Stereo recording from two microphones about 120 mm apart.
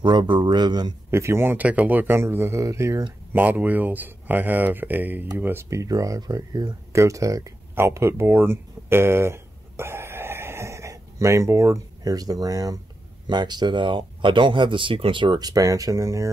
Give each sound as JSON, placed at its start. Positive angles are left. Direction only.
{"t": 0.0, "sound": "speech", "side_deg": -40}
{"t": 1.1, "sound": "speech", "side_deg": -20}